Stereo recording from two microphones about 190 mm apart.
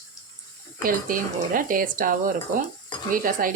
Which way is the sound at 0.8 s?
45° right (ahead or behind).